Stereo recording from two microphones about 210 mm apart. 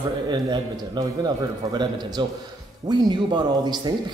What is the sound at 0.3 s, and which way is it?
A man's voice, 20° right (ahead or behind).